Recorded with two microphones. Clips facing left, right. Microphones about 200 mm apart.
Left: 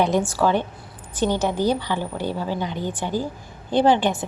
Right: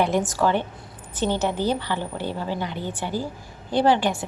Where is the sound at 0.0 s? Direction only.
15° left (ahead or behind).